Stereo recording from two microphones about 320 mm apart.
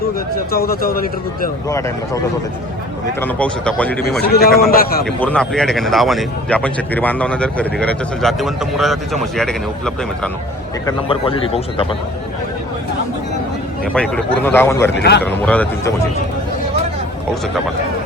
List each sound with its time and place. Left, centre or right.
0.5 s a man's voice: left
3.2 s speech: centre
4.2 s a man's voice: left
5.0 s speech: centre
10.8 s a man's voice: centre
13.9 s a man's voice: centre
14.9 s speech: left
15.2 s speech: centre